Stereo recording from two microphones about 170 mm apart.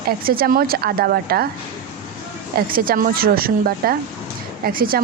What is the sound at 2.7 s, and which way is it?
A woman's voice, 55° right (ahead or behind).